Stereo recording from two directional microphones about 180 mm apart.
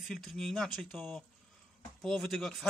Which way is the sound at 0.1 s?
Centre (ahead or behind).